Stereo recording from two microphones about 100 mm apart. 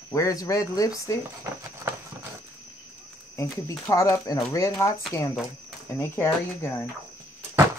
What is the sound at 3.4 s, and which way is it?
Speech, 30° left (ahead or behind).